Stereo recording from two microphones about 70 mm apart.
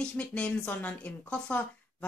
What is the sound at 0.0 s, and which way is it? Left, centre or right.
A woman's voice, centre.